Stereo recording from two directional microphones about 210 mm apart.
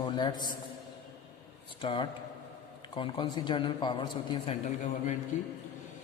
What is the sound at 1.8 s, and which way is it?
Speech, 25° left (ahead or behind).